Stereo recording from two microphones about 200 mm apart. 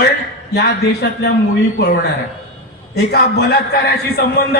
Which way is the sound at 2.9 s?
55° left (ahead or behind).